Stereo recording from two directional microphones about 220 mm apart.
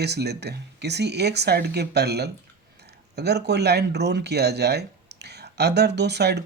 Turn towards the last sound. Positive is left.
turn(degrees=-50)  # may be behind; listen again after turning